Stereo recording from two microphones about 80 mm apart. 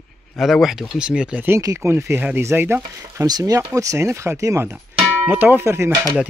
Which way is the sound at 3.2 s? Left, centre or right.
Right.